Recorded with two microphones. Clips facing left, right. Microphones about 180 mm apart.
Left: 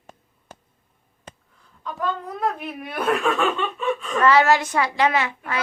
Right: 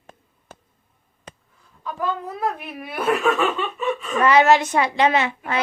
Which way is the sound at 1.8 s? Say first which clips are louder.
Right 1 dB; 5° right (ahead or behind).